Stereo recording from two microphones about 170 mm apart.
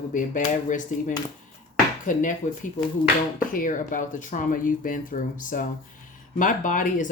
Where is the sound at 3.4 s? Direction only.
55° left (ahead or behind).